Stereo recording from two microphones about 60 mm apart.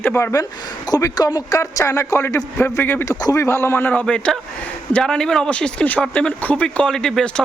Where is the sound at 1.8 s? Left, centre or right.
Left.